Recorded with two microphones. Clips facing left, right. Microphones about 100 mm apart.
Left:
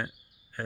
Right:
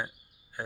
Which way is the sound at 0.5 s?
15° right (ahead or behind).